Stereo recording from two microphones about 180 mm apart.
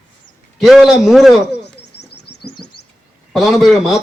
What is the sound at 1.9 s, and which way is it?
Bird, 65° left (ahead or behind).